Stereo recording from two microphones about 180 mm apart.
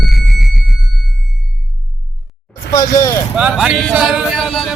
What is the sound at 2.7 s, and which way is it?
Vehicle, 20° left (ahead or behind).